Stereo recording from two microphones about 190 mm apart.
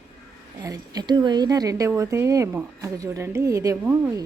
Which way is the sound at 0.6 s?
20° right (ahead or behind).